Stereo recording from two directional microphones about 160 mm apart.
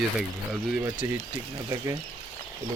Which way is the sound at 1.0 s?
15° right (ahead or behind).